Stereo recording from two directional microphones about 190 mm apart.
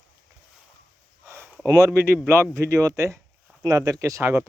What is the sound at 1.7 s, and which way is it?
Speech, 15° right (ahead or behind).